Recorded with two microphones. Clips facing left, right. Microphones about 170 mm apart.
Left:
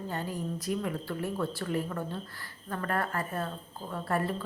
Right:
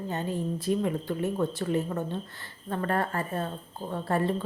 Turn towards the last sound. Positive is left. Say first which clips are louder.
# right 3 dB
turn(degrees=-25)  # may be behind; listen again after turning